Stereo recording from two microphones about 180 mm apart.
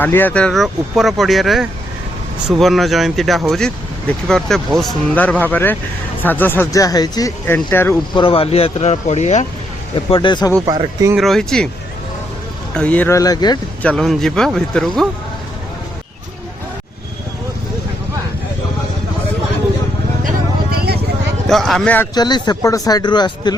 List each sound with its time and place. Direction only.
0.0 s speech: 10° left (ahead or behind)
8.1 s speech: 30° left (ahead or behind)
9.9 s speech: 25° left (ahead or behind)
10.5 s speech: 20° right (ahead or behind)
11.2 s speech: centre (ahead or behind)
12.7 s speech: 5° left (ahead or behind)
13.8 s speech: 5° left (ahead or behind)
20.2 s vehicle: 60° right (ahead or behind)
21.4 s speech: centre (ahead or behind)
22.1 s speech: 25° left (ahead or behind)